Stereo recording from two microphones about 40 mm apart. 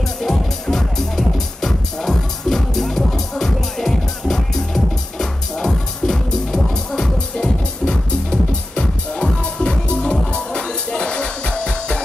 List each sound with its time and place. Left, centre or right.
0.2 s music: centre